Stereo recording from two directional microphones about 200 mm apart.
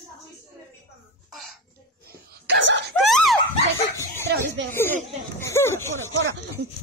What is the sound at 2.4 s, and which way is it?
Wail, 60° right (ahead or behind).